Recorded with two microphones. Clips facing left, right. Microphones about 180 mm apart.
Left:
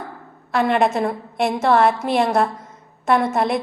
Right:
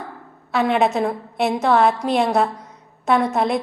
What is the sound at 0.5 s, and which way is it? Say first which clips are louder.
A woman's voice: even; centre (ahead or behind).